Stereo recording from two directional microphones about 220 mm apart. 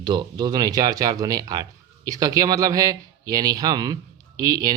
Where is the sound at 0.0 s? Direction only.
20° right (ahead or behind).